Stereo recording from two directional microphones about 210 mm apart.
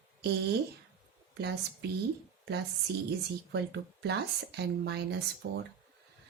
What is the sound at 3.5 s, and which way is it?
A woman's voice, 50° right (ahead or behind).